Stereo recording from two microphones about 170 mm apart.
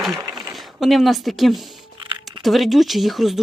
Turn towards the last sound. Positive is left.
turn(degrees=0)  # may be behind; listen again after turning